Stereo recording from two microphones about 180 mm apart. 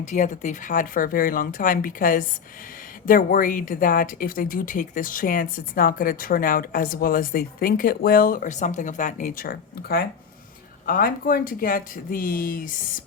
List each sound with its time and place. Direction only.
0.0 s speech: 45° left (ahead or behind)